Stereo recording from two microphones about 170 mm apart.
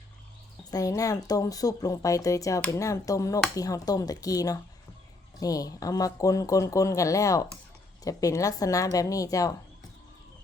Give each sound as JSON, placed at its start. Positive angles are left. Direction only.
{"t": 0.7, "sound": "speech", "side_deg": 20}